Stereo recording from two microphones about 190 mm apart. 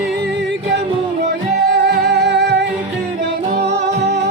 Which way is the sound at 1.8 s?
60° right (ahead or behind).